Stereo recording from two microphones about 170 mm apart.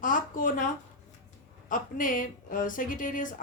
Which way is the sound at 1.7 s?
50° left (ahead or behind).